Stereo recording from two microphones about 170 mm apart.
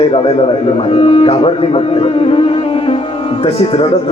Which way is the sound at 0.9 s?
35° left (ahead or behind).